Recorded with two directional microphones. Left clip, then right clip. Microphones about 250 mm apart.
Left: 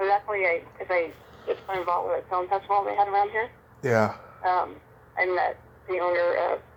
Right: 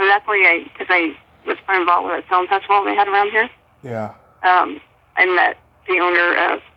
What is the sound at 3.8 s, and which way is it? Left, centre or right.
Speech, centre.